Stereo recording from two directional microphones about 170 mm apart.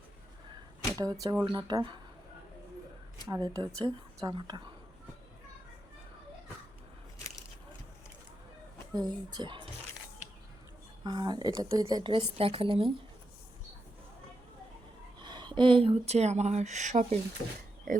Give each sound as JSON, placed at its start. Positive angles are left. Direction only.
{"t": 0.9, "sound": "a woman's voice", "side_deg": -20}
{"t": 3.2, "sound": "a woman's voice", "side_deg": -20}
{"t": 9.0, "sound": "a woman's voice", "side_deg": -25}
{"t": 11.0, "sound": "a woman's voice", "side_deg": -25}
{"t": 15.2, "sound": "speech", "side_deg": -25}